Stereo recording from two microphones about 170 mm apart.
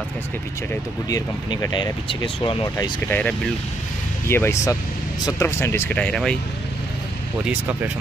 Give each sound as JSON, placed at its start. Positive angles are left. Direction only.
{"t": 1.0, "sound": "speech", "side_deg": 20}
{"t": 3.1, "sound": "speech", "side_deg": 5}
{"t": 7.4, "sound": "speech", "side_deg": -10}